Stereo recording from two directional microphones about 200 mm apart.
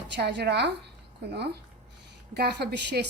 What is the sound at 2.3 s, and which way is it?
Speech, 55° right (ahead or behind).